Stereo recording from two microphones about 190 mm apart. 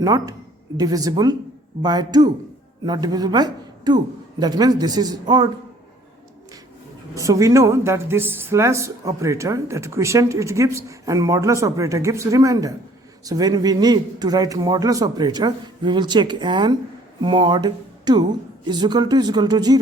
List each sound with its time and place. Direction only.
0.0 s a man's voice: 20° right (ahead or behind)
7.2 s a woman's voice: 15° right (ahead or behind)